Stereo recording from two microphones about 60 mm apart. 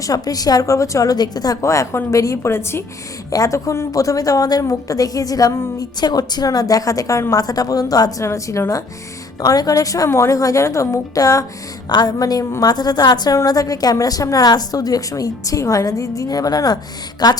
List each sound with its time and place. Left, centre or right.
0.0 s a woman's voice: left
1.6 s a woman's voice: left
2.0 s a woman's voice: left
2.4 s a woman's voice: left
3.2 s a woman's voice: left
8.2 s a woman's voice: left
9.4 s a woman's voice: left
10.1 s a woman's voice: left
11.2 s a woman's voice: left
12.2 s a woman's voice: left
12.5 s a woman's voice: left